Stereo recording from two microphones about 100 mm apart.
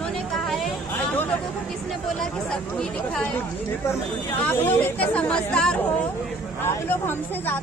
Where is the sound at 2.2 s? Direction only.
5° left (ahead or behind).